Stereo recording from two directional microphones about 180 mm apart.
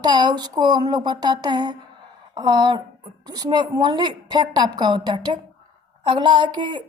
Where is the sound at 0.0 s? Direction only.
25° right (ahead or behind).